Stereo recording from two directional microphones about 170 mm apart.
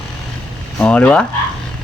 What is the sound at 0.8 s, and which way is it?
Speech, 5° left (ahead or behind).